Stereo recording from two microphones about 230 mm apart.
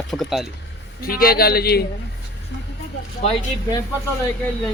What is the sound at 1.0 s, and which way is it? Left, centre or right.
Speech, left.